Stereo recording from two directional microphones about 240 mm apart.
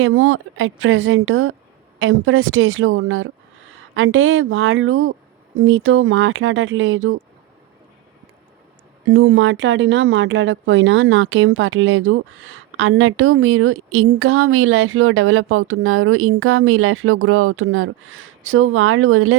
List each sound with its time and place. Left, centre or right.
0.0 s a woman's voice: right
9.0 s a woman's voice: right